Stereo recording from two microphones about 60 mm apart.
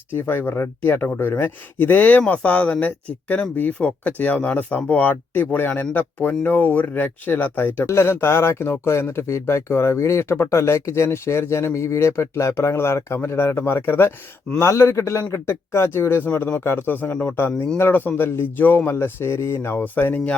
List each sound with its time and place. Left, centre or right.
0.1 s speech: left
7.9 s a man's voice: left